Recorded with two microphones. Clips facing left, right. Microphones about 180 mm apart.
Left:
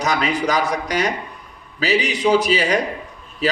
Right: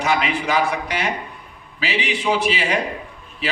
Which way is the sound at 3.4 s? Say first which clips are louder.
Left 4 dB; 40° left (ahead or behind).